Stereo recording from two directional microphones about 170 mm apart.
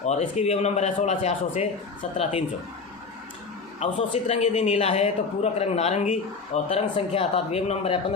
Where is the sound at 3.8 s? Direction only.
40° left (ahead or behind).